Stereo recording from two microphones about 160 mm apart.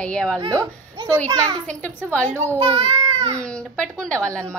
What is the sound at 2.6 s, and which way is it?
Speech, 35° right (ahead or behind).